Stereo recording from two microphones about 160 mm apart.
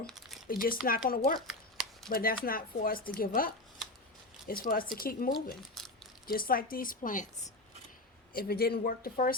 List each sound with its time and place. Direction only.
0.1 s a sound: centre (ahead or behind)
0.4 s speech: 65° left (ahead or behind)
1.4 s shuffling cards: 5° right (ahead or behind)
2.0 s speech: 65° left (ahead or behind)
5.8 s crumpling: centre (ahead or behind)
6.2 s speech: 65° left (ahead or behind)
8.3 s speech: 70° left (ahead or behind)